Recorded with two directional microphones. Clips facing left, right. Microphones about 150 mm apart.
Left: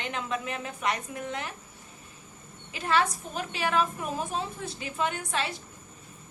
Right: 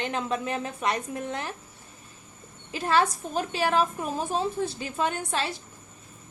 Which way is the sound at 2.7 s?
35° right (ahead or behind).